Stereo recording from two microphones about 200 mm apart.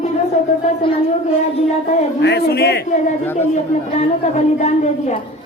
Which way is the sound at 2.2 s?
55° left (ahead or behind).